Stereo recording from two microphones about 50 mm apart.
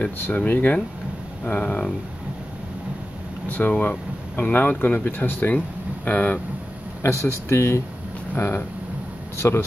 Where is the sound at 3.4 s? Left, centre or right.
Left.